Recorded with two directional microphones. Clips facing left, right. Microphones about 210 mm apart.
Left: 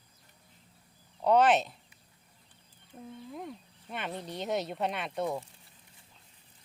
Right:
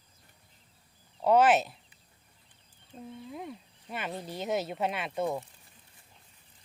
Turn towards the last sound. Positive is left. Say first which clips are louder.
# right 1 dB
turn(degrees=-5)  # may be behind; listen again after turning